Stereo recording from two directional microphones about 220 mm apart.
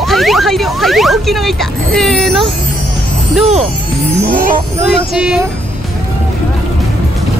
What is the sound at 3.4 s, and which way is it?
Speech, 30° right (ahead or behind).